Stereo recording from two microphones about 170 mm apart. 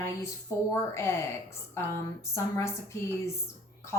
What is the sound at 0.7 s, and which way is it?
Speech, 15° left (ahead or behind).